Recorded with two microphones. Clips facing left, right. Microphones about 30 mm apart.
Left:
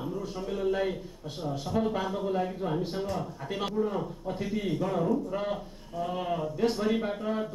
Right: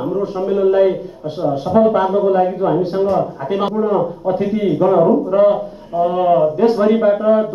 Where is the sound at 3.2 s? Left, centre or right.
Right.